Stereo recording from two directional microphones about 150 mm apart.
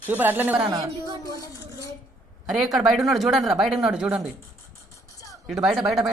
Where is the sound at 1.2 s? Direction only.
25° left (ahead or behind).